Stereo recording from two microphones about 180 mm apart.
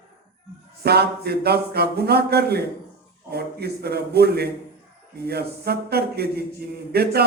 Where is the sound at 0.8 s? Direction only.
65° right (ahead or behind).